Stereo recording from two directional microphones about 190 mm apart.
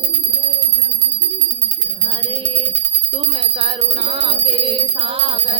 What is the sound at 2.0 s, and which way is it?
Music, 25° right (ahead or behind).